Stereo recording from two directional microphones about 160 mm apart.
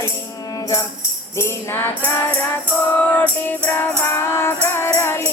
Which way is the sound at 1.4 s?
15° left (ahead or behind).